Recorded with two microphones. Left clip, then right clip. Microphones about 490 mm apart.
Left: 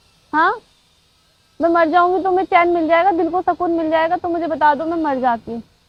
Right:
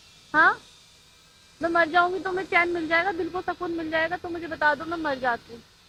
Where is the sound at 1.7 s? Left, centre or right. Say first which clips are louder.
Left 7 dB; left.